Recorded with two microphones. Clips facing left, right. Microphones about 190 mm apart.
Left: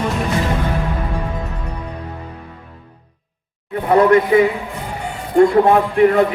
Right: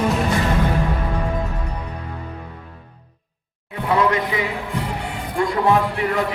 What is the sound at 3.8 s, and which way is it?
Speech, 50° left (ahead or behind).